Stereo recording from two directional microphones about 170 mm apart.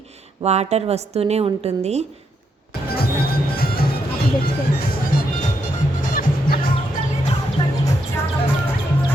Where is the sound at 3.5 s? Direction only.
60° left (ahead or behind).